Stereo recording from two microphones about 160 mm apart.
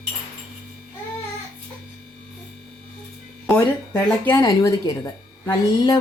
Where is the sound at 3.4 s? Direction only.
5° left (ahead or behind); by 6.0 s 25° left (ahead or behind).